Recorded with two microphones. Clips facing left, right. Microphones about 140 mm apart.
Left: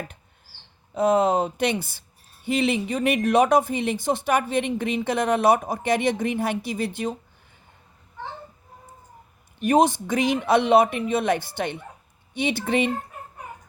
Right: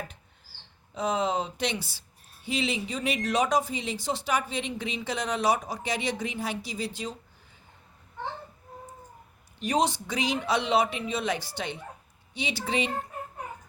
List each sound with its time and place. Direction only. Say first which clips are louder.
0.9 s speech: left 8 dB; 55° left (ahead or behind)
9.6 s speech: left 7 dB; 55° left (ahead or behind)